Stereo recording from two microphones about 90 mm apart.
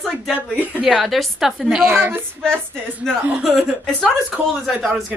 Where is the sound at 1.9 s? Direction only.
25° right (ahead or behind).